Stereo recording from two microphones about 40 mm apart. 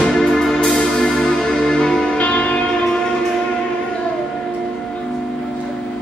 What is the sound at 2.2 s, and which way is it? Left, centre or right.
Music, left.